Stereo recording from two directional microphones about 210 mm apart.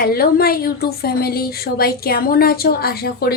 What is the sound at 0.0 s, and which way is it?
A woman's voice, 45° left (ahead or behind).